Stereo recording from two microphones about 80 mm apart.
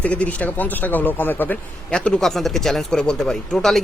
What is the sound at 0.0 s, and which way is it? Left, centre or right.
Speech, centre.